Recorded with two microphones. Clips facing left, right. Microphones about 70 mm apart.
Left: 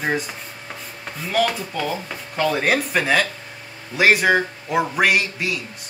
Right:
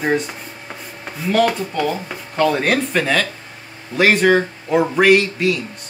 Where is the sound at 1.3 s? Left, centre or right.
Centre.